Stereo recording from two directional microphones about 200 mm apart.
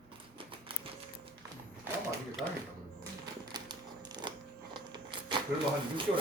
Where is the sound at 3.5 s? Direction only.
20° right (ahead or behind).